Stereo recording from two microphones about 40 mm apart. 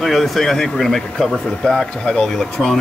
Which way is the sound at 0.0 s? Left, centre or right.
Centre.